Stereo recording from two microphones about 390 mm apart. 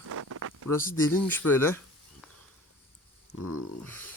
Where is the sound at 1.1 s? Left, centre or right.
Centre.